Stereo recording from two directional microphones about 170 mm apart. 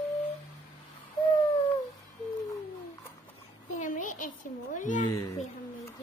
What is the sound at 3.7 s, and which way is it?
A child's voice, 45° left (ahead or behind).